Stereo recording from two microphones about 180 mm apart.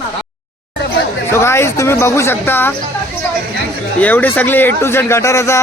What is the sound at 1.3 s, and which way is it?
A man's voice, 15° left (ahead or behind).